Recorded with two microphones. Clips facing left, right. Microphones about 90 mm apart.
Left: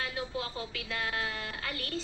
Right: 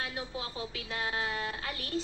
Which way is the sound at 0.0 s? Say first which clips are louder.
Left 2 dB; 55° left (ahead or behind).